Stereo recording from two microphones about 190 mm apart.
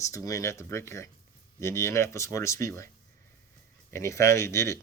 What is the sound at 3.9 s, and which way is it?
Speech, 15° left (ahead or behind).